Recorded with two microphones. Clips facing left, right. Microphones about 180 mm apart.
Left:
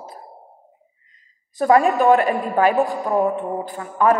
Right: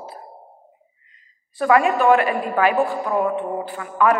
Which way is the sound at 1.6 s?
40° left (ahead or behind).